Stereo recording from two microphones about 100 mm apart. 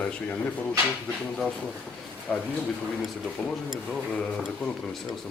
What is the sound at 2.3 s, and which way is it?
Speech, 5° left (ahead or behind).